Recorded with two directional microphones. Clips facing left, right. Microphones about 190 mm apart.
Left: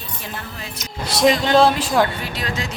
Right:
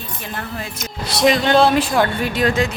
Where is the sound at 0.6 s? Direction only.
50° right (ahead or behind).